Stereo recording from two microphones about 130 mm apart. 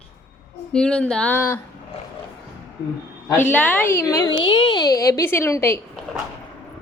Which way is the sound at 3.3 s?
15° left (ahead or behind).